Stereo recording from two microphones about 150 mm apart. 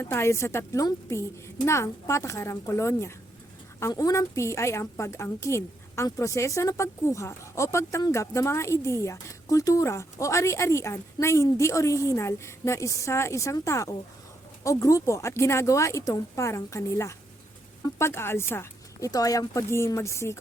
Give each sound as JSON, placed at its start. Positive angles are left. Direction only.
{"t": 0.0, "sound": "a woman's voice", "side_deg": 15}